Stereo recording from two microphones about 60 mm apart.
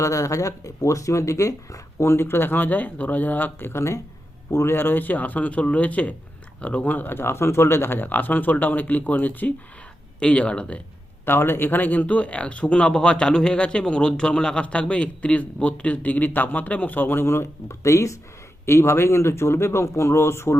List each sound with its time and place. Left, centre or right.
0.0 s speech: left
2.1 s speech: left
10.2 s speech: centre
11.3 s speech: left
18.6 s speech: left